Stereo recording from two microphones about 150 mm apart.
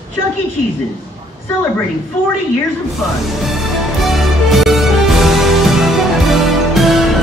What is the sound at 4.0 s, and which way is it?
Music, centre (ahead or behind).